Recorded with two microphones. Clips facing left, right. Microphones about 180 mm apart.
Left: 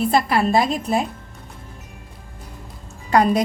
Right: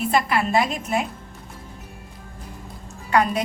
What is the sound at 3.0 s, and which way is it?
Speech, 35° left (ahead or behind).